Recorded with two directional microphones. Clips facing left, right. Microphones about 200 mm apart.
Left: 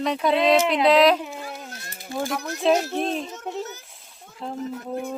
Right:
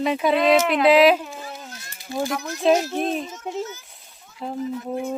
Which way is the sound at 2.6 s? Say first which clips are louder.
Right 2 dB; centre (ahead or behind).